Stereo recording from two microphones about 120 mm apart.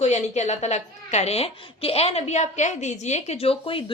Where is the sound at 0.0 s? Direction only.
70° left (ahead or behind).